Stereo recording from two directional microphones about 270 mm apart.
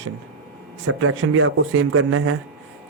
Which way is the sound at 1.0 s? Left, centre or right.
Right.